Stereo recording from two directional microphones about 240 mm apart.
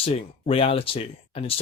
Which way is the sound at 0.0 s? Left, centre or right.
Left.